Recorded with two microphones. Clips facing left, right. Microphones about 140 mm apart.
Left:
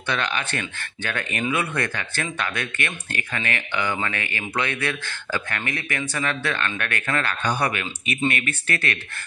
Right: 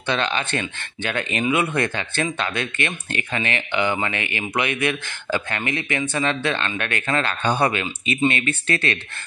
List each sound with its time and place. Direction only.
0.0 s speech: 25° right (ahead or behind)